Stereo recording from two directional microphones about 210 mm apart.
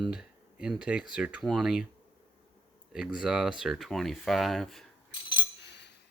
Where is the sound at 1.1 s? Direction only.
5° right (ahead or behind).